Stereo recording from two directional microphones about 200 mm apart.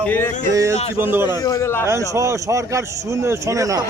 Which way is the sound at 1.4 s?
15° left (ahead or behind).